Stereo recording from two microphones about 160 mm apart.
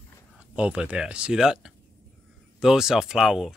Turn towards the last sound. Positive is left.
turn(degrees=-5)  # may be behind; listen again after turning